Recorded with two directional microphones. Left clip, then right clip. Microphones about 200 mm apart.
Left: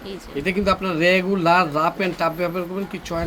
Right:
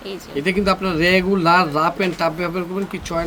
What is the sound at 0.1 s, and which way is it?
Speech, 10° right (ahead or behind).